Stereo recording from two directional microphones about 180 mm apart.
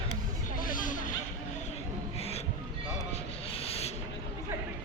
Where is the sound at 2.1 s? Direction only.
35° left (ahead or behind).